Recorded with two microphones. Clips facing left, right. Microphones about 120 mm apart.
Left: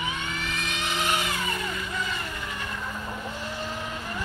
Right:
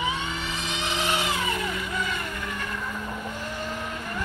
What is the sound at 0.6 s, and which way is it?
Vehicle, 25° right (ahead or behind).